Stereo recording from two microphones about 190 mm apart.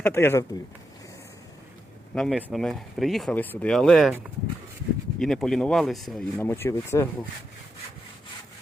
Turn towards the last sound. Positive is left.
turn(degrees=15)  # may be behind; listen again after turning